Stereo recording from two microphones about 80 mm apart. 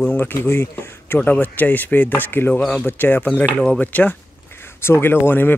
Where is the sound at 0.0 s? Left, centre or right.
Left.